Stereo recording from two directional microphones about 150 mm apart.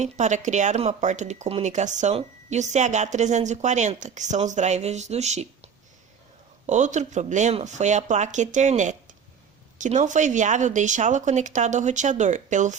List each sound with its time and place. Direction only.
0.0 s speech: 50° right (ahead or behind)